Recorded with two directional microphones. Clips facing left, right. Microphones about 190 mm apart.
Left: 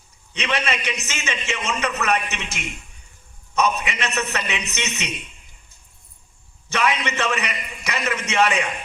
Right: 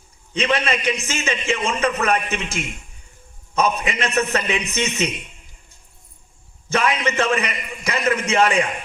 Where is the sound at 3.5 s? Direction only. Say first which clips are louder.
Right 1 dB; 50° right (ahead or behind).